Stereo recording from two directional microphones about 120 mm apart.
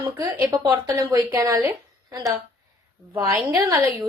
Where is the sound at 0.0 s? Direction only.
30° right (ahead or behind).